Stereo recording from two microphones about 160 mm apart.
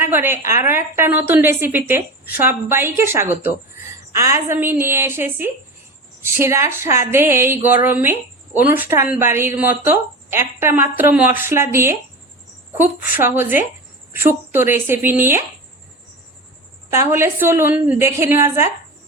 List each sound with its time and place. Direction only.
0.0 s a woman's voice: 15° right (ahead or behind)
16.9 s a woman's voice: 15° right (ahead or behind)